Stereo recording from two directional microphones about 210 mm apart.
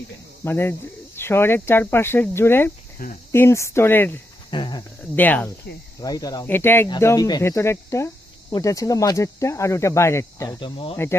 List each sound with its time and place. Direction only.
0.4 s speech: 10° left (ahead or behind)
3.0 s speech: 45° left (ahead or behind)
3.3 s speech: 10° left (ahead or behind)
4.5 s cricket: 20° left (ahead or behind)
5.1 s speech: 10° left (ahead or behind); by 10.9 s 25° left (ahead or behind)
10.9 s speech: 10° left (ahead or behind)